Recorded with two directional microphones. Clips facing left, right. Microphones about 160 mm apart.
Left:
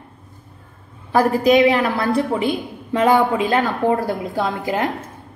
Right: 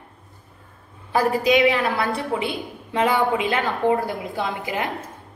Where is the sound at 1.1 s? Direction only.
45° left (ahead or behind).